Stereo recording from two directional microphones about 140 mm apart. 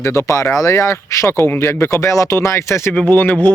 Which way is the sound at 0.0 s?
20° left (ahead or behind).